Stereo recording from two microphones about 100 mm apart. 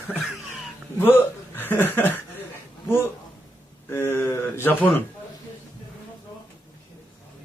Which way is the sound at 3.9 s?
25° left (ahead or behind).